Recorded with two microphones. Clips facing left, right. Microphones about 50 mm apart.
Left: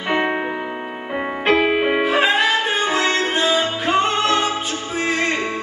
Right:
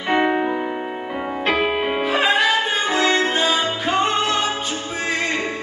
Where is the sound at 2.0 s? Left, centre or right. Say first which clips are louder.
Right 3 dB; centre.